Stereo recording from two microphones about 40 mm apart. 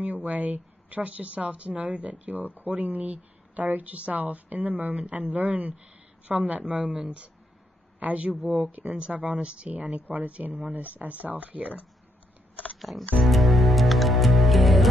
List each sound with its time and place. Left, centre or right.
0.0 s speech: right
12.7 s music: centre